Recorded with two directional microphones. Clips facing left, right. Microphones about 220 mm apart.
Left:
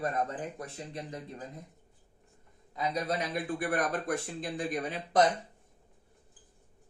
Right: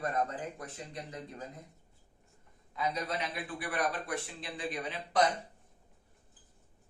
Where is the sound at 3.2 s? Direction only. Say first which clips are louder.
Left 6 dB; 45° left (ahead or behind).